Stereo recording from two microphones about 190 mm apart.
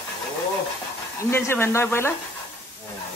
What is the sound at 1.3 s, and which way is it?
Speech, 10° left (ahead or behind).